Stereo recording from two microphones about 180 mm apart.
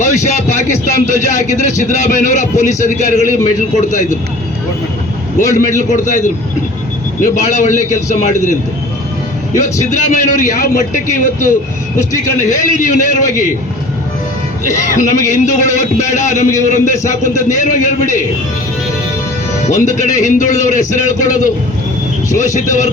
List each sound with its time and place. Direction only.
0.0 s a sound: 40° left (ahead or behind)
1.0 s a man's voice: 45° left (ahead or behind)
5.5 s a man's voice: 45° left (ahead or behind)
9.9 s a man's voice: 45° left (ahead or behind)
14.7 s a man's voice: 45° left (ahead or behind)
19.6 s a man's voice: 40° left (ahead or behind)